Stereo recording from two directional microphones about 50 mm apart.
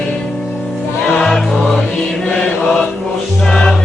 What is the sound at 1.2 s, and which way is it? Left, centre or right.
Mantra, centre.